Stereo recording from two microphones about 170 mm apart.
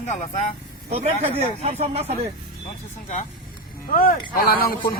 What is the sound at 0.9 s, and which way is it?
Speech, 40° right (ahead or behind).